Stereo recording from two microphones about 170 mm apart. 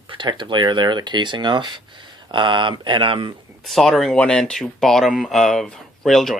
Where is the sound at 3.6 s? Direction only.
Centre (ahead or behind).